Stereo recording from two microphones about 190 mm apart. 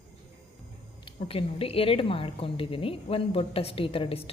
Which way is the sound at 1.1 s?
30° left (ahead or behind).